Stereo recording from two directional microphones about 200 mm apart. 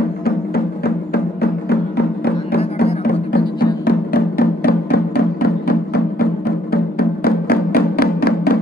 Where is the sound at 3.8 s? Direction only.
50° left (ahead or behind).